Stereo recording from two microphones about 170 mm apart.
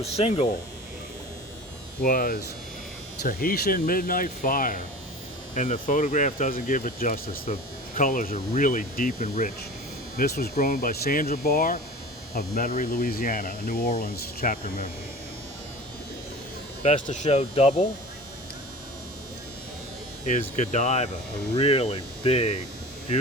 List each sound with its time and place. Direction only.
0.0 s hum: 35° left (ahead or behind)
2.0 s speech: 55° left (ahead or behind)
10.2 s speech: 65° left (ahead or behind)
16.8 s hum: 45° left (ahead or behind)
20.2 s speech: 45° left (ahead or behind)
21.6 s hum: 35° left (ahead or behind)